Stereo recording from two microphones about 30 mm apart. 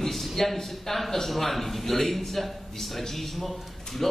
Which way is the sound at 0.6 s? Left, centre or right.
Centre.